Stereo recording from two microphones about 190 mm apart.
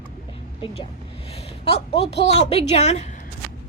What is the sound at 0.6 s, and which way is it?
A woman's voice, 30° left (ahead or behind).